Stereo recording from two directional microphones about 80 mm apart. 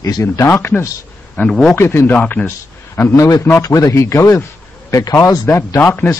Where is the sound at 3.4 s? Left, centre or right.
Left.